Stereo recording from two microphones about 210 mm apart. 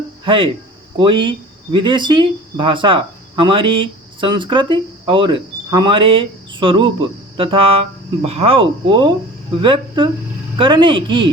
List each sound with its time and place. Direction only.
0.3 s speech: 25° right (ahead or behind)